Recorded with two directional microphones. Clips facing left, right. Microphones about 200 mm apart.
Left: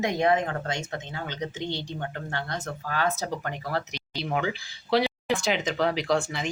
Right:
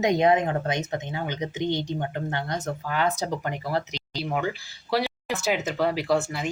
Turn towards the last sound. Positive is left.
turn(degrees=-5)  # may be behind; listen again after turning